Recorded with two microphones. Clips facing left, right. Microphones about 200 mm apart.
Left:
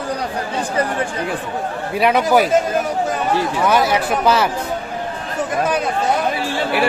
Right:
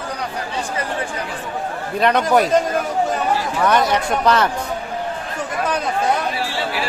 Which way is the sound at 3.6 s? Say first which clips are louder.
Right 1 dB; 5° left (ahead or behind).